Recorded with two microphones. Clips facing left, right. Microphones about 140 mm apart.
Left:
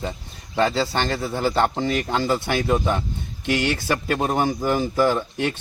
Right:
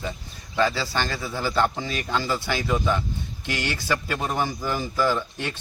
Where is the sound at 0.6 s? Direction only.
55° left (ahead or behind).